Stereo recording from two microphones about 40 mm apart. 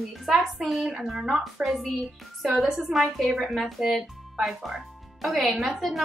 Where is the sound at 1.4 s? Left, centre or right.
Centre.